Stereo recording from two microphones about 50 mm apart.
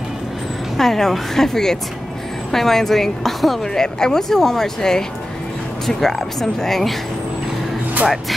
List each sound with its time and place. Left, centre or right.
0.7 s a woman's voice: centre